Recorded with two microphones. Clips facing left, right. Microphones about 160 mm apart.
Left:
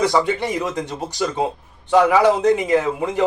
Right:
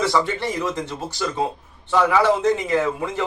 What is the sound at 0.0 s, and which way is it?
A man's voice, 15° left (ahead or behind).